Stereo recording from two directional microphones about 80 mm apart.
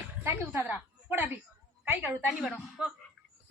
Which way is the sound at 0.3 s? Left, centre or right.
Right.